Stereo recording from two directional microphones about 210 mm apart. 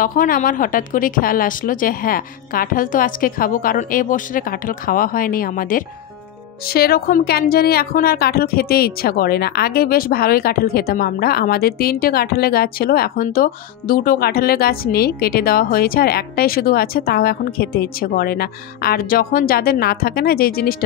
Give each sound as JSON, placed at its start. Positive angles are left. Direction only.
{"t": 0.0, "sound": "a woman's voice", "side_deg": 40}